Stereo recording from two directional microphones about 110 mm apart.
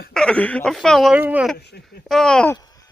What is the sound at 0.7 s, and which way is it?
Speech, centre (ahead or behind).